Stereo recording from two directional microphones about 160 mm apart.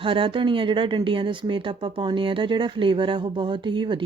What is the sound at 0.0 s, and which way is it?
Speech, 35° right (ahead or behind).